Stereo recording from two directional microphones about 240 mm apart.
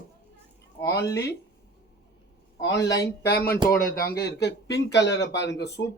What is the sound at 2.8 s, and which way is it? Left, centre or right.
Speech, left.